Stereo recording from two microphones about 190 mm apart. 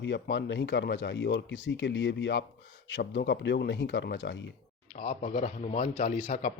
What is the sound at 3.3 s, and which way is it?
Speech, 60° left (ahead or behind).